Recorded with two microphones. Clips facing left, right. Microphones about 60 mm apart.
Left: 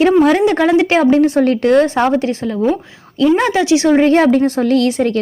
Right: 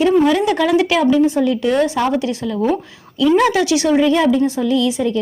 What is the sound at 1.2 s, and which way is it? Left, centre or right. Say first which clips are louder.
A woman's voice: left 3 dB; left.